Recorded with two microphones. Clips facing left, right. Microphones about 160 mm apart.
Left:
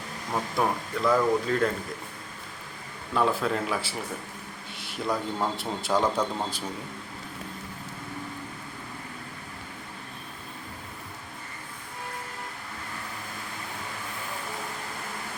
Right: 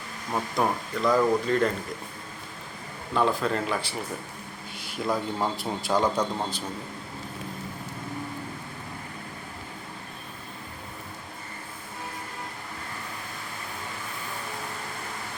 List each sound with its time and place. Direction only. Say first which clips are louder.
0.3 s a man's voice: right 1 dB; centre (ahead or behind)
3.2 s a man's voice: right 1 dB; centre (ahead or behind)